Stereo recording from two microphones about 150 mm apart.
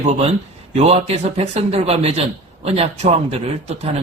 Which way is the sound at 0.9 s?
45° right (ahead or behind).